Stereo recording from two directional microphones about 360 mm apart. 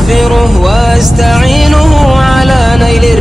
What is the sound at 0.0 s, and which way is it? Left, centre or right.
Music, centre.